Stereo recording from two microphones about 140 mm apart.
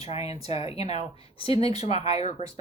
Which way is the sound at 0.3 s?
50° left (ahead or behind).